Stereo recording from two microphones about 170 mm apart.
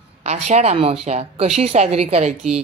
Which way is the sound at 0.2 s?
40° right (ahead or behind).